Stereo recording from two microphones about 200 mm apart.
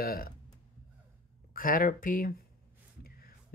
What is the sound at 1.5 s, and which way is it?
Speech, 45° left (ahead or behind).